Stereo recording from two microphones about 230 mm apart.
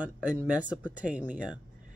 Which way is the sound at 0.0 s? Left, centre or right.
Centre.